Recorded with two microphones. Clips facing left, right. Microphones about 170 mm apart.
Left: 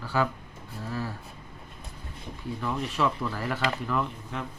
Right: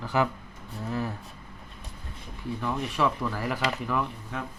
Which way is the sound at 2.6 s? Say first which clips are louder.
Right 1 dB; 10° right (ahead or behind).